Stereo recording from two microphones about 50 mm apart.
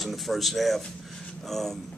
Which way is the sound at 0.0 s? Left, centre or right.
Centre.